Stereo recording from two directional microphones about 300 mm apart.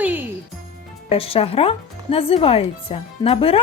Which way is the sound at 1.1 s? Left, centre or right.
Centre.